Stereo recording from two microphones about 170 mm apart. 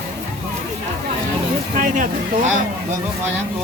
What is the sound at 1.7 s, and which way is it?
Speech, 50° right (ahead or behind).